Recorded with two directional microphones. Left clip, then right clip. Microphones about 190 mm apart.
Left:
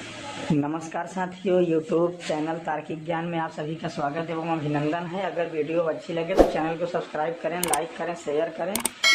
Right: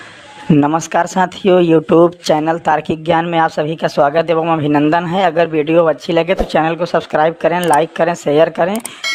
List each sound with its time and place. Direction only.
0.5 s speech: 45° right (ahead or behind)
8.7 s speech: centre (ahead or behind)